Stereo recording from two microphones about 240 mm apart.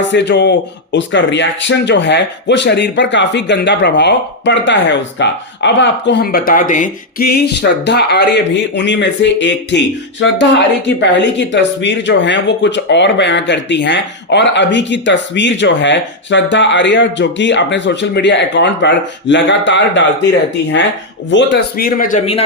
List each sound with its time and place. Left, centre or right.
0.0 s speech: left
21.2 s speech: left